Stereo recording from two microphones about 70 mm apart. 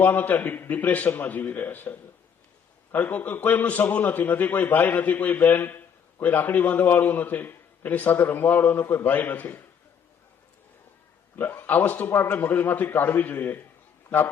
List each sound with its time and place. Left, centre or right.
0.0 s a man's voice: left
11.3 s a man's voice: left